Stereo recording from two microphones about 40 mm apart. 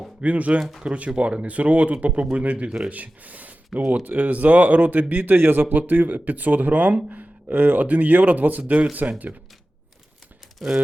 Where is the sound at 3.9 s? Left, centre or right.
Right.